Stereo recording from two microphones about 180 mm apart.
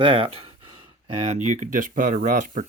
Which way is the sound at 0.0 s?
30° right (ahead or behind).